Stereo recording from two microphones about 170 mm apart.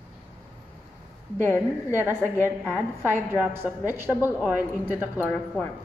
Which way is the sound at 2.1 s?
15° left (ahead or behind).